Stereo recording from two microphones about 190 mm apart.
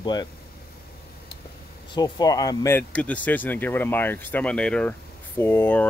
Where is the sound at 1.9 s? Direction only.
20° left (ahead or behind).